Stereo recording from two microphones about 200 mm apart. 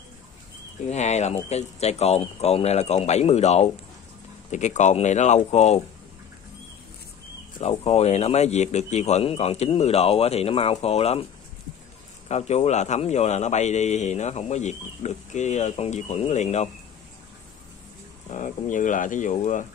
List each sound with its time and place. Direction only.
0.8 s a man's voice: 35° left (ahead or behind)
7.5 s a man's voice: 35° left (ahead or behind)
12.3 s a man's voice: 35° left (ahead or behind)
18.3 s a man's voice: 40° left (ahead or behind)